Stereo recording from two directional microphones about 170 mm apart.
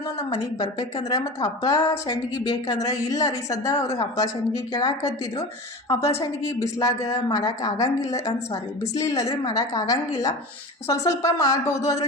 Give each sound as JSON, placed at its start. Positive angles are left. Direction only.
{"t": 0.2, "sound": "a woman's voice", "side_deg": 25}